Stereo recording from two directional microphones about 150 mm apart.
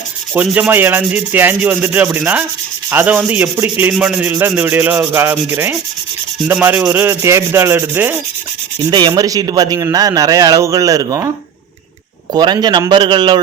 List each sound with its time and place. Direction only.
0.3 s rub: 10° right (ahead or behind)
8.9 s a man's voice: 30° right (ahead or behind)
12.3 s a man's voice: 30° right (ahead or behind)